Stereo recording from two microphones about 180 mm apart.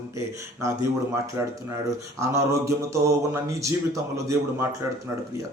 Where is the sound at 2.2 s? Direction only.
15° right (ahead or behind).